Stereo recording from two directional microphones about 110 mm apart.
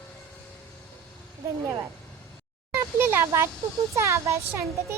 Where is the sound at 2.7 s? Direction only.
20° right (ahead or behind).